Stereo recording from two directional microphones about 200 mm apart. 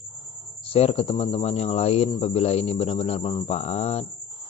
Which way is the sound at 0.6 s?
30° left (ahead or behind).